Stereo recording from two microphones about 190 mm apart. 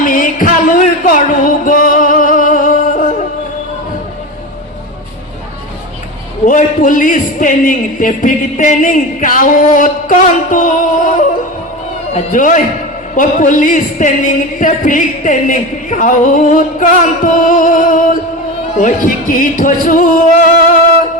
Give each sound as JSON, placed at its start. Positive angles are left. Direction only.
{"t": 0.0, "sound": "music", "side_deg": 45}
{"t": 6.4, "sound": "speech", "side_deg": 45}